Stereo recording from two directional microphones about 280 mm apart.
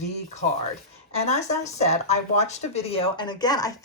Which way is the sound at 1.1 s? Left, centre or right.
Left.